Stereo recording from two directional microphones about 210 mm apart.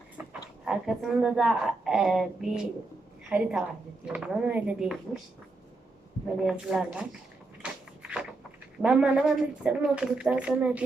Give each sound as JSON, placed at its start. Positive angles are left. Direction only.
{"t": 0.6, "sound": "a woman's voice", "side_deg": 0}
{"t": 6.4, "sound": "speech", "side_deg": 0}
{"t": 7.6, "sound": "a sound", "side_deg": -5}
{"t": 8.8, "sound": "speech", "side_deg": -5}